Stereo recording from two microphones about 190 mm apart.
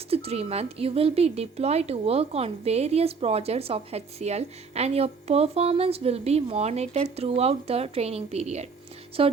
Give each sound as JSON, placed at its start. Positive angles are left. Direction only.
{"t": 0.1, "sound": "speech", "side_deg": -30}